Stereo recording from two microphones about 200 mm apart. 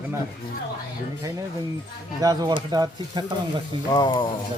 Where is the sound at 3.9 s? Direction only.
25° left (ahead or behind).